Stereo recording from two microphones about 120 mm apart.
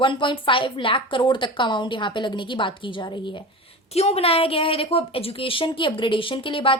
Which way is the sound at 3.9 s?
60° left (ahead or behind).